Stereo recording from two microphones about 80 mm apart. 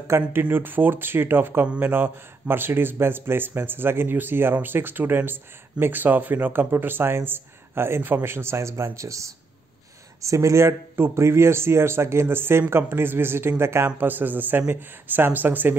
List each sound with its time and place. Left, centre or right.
0.1 s speech: right